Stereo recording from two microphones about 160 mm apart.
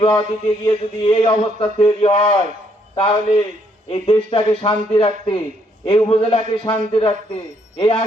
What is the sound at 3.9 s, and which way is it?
Speech, 35° left (ahead or behind).